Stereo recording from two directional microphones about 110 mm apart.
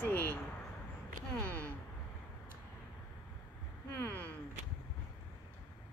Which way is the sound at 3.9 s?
20° left (ahead or behind).